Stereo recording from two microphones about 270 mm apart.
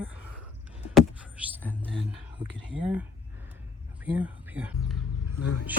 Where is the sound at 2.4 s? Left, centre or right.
Centre.